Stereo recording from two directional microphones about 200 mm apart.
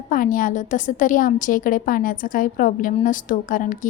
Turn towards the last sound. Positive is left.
turn(degrees=40)  # may be behind; listen again after turning